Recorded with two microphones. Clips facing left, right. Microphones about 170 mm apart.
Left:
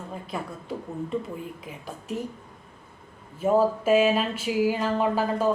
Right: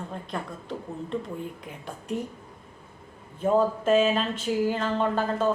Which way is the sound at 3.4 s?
5° left (ahead or behind).